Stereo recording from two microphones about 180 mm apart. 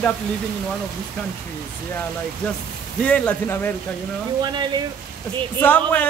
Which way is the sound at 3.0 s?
5° left (ahead or behind).